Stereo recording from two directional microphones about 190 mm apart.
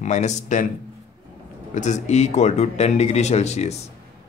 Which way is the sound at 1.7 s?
40° left (ahead or behind).